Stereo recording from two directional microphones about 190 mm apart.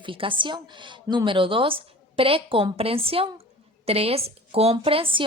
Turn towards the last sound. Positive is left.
turn(degrees=-30)  # may be behind; listen again after turning